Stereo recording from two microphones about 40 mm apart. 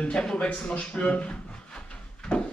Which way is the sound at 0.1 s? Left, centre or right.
Left.